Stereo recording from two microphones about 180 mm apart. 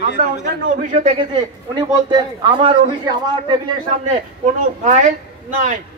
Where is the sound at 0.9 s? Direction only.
40° right (ahead or behind).